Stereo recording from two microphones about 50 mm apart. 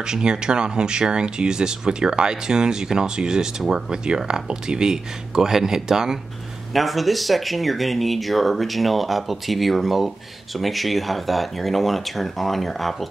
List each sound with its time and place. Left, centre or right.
0.0 s speech: centre
6.7 s speech: centre